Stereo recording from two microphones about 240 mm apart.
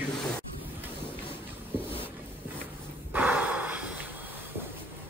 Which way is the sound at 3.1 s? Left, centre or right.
Centre.